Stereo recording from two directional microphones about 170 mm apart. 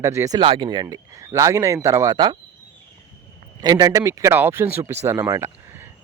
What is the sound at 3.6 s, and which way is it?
Speech, 25° right (ahead or behind).